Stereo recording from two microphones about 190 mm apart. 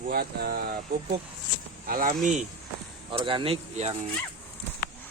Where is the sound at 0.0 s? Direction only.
55° right (ahead or behind).